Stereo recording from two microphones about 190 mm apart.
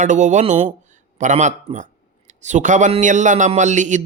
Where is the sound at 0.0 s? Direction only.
40° right (ahead or behind).